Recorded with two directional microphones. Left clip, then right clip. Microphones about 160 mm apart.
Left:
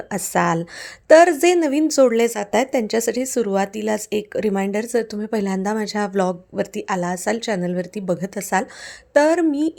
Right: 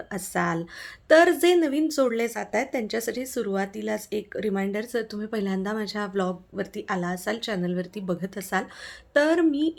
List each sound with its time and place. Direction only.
0.1 s speech: 55° left (ahead or behind)